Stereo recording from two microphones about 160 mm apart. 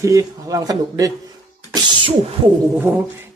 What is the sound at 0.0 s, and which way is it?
Speech, 20° right (ahead or behind).